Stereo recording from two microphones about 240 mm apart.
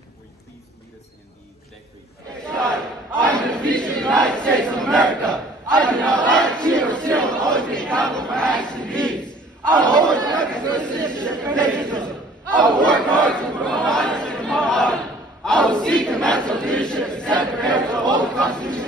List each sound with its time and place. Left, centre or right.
2.5 s battle cry: centre
9.1 s battle cry: centre
9.8 s chatter: centre
12.5 s crowd: centre
18.1 s a sound: centre